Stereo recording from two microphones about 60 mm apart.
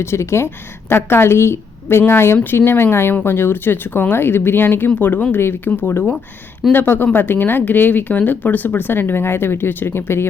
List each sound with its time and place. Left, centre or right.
0.0 s a woman's voice: left